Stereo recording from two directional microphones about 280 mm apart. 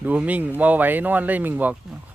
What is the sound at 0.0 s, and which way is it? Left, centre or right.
Speech, centre.